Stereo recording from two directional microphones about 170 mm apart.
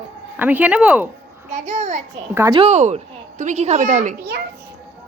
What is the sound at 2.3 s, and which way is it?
Speech, 15° right (ahead or behind).